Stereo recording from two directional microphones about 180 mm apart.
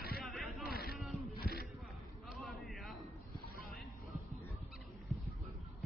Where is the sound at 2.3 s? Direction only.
Centre (ahead or behind).